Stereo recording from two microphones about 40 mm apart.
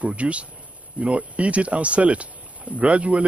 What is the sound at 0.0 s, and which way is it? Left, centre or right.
Speech, right.